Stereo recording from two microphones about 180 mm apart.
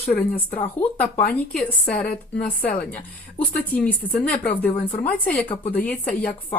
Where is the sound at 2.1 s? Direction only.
55° left (ahead or behind).